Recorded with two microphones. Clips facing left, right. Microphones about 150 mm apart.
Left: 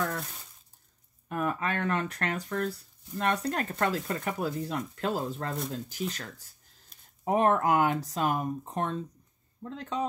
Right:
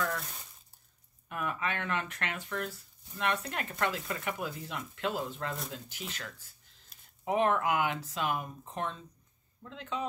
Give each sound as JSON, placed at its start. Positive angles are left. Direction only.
{"t": 1.3, "sound": "speech", "side_deg": 40}
{"t": 6.9, "sound": "a sound", "side_deg": -5}
{"t": 7.2, "sound": "speech", "side_deg": 40}